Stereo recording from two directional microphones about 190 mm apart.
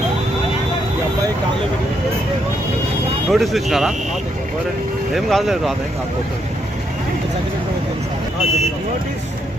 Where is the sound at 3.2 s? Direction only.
Centre (ahead or behind).